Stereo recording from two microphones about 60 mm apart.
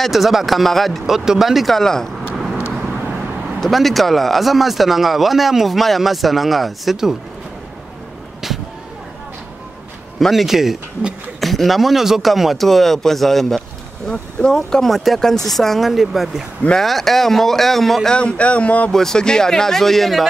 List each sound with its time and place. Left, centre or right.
0.0 s speech: centre
3.6 s speech: centre
10.1 s speech: centre
11.4 s speech: centre
18.1 s speech: centre
18.9 s speech: centre